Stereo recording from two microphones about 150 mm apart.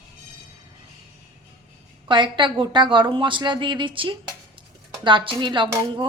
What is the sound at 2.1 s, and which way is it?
A woman's voice, 30° right (ahead or behind).